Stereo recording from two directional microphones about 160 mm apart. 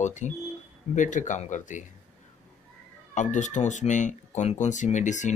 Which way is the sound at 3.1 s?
50° left (ahead or behind).